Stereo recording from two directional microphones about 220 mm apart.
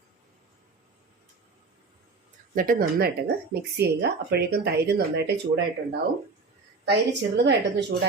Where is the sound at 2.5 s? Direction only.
40° right (ahead or behind).